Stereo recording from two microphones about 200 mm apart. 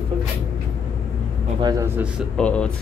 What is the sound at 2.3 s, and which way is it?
Speech, 5° left (ahead or behind).